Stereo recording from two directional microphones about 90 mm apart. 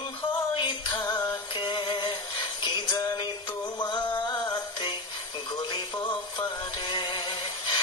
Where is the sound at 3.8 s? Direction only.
55° left (ahead or behind).